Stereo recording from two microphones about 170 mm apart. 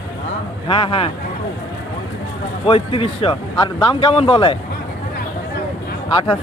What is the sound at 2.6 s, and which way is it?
Speech, 35° left (ahead or behind).